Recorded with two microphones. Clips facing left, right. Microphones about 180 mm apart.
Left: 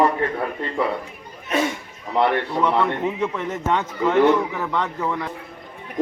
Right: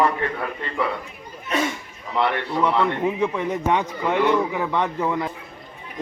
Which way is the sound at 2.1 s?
45° left (ahead or behind).